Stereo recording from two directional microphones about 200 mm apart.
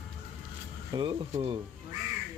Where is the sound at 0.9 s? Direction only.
25° right (ahead or behind).